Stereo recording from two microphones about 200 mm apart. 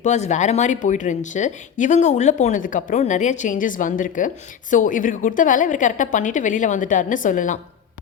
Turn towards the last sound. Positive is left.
turn(degrees=40)  # may be behind; listen again after turning